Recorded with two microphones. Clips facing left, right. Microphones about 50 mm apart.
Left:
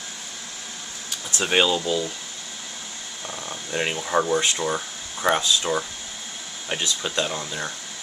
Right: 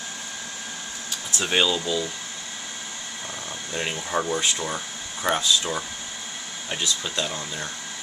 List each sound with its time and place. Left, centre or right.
1.4 s speech: centre
3.7 s speech: centre